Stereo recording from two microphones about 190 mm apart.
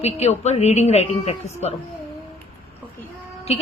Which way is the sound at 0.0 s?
35° left (ahead or behind).